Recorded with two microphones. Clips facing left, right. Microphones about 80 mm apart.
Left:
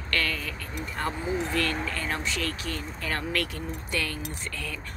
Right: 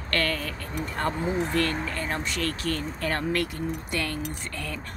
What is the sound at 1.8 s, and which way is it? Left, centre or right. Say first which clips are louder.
Speech: right 1 dB; right.